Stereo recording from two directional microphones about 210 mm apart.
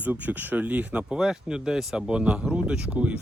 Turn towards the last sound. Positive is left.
turn(degrees=-5)  # may be behind; listen again after turning